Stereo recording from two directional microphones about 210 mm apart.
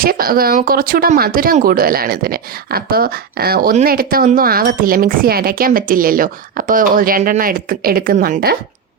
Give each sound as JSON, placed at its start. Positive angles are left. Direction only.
{"t": 0.0, "sound": "speech", "side_deg": -45}